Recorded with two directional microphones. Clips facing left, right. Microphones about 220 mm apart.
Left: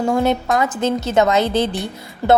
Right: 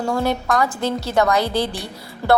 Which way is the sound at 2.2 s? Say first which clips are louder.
Left 2 dB; 15° left (ahead or behind).